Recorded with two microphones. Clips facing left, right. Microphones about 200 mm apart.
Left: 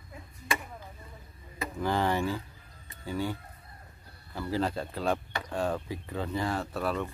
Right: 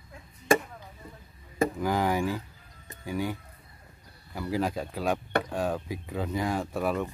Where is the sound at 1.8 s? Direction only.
10° right (ahead or behind).